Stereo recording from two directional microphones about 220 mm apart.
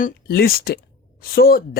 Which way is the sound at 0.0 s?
45° left (ahead or behind).